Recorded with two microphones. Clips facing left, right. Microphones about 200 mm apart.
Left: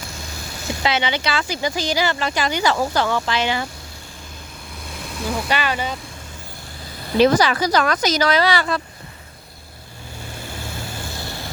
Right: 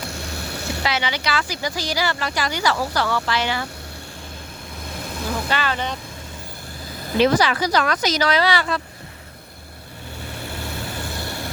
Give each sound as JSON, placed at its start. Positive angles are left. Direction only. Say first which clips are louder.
{"t": 0.1, "sound": "boat", "louder": "right 4 dB", "side_deg": -65}
{"t": 0.8, "sound": "speech", "louder": "left 4 dB", "side_deg": 25}
{"t": 5.5, "sound": "speech", "louder": "left 2 dB", "side_deg": 15}
{"t": 7.2, "sound": "speech", "louder": "left 2 dB", "side_deg": 40}
{"t": 10.4, "sound": "vehicle", "louder": "right 2 dB", "side_deg": -60}